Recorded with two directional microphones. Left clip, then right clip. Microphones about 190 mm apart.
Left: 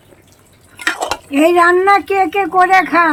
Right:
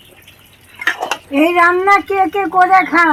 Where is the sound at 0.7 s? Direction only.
25° left (ahead or behind).